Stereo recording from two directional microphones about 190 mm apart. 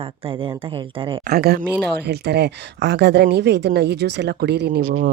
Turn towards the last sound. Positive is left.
turn(degrees=-60)  # may be behind; listen again after turning